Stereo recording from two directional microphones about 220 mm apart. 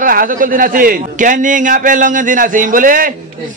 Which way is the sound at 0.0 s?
40° right (ahead or behind).